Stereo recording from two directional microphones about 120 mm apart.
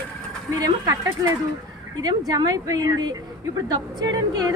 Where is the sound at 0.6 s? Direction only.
30° right (ahead or behind).